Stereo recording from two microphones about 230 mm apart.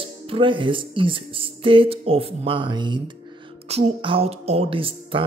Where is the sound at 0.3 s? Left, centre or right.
Right.